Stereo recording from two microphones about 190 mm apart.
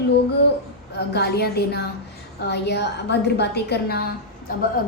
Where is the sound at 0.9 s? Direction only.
60° left (ahead or behind).